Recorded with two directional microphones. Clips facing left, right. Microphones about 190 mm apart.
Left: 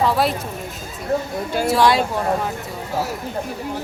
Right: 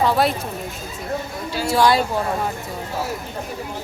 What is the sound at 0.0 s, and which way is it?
Speech, centre (ahead or behind).